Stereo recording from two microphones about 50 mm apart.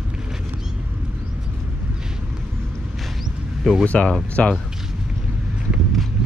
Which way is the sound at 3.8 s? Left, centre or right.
Left.